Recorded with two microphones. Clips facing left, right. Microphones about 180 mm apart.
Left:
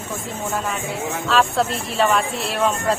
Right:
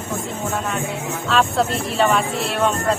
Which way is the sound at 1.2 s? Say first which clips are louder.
Right 1 dB; centre (ahead or behind).